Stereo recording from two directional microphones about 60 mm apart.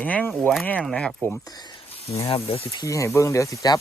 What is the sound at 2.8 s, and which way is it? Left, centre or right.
Speech, left.